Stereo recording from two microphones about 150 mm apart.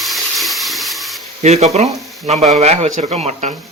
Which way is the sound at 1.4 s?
45° right (ahead or behind).